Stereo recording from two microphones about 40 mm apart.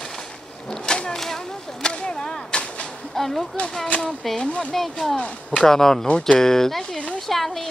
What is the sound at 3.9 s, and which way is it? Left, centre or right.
Speech, left.